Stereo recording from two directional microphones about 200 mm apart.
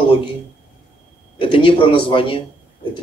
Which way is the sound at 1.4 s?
25° left (ahead or behind).